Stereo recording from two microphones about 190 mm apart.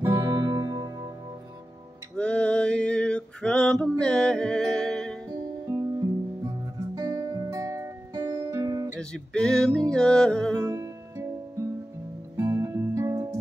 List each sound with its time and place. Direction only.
0.0 s music: 15° right (ahead or behind)
2.1 s male singing: 5° left (ahead or behind)
4.0 s music: 5° left (ahead or behind)
7.0 s music: 15° right (ahead or behind)
9.1 s music: 5° left (ahead or behind)
10.6 s music: 15° right (ahead or behind)
12.4 s music: 10° right (ahead or behind)